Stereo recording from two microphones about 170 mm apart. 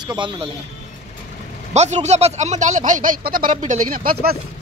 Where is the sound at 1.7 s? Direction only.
40° right (ahead or behind).